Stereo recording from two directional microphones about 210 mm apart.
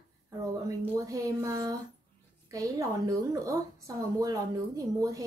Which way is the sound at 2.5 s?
15° right (ahead or behind).